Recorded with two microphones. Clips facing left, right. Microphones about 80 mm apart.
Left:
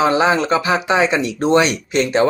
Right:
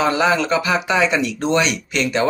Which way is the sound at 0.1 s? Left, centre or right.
Left.